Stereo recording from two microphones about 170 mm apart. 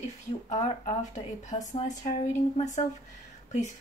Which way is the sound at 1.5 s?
45° left (ahead or behind).